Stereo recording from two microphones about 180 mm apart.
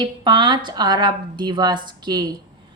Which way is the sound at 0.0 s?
25° right (ahead or behind).